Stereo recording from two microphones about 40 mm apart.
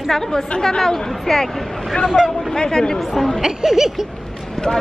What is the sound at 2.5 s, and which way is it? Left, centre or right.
Speech, centre.